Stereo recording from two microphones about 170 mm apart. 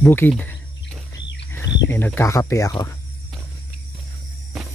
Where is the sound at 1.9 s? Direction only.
10° left (ahead or behind).